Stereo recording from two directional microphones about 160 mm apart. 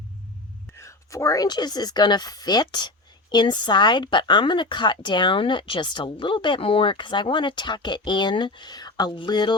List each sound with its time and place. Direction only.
0.7 s speech: 20° left (ahead or behind)